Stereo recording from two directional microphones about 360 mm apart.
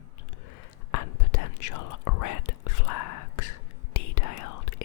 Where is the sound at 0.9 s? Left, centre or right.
Left.